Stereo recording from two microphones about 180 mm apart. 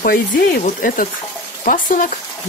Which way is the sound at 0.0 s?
55° left (ahead or behind).